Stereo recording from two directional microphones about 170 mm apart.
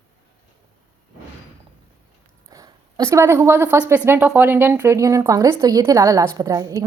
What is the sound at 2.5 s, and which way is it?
A woman's voice, 20° right (ahead or behind).